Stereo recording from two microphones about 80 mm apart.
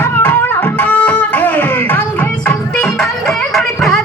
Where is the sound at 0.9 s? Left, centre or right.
Centre.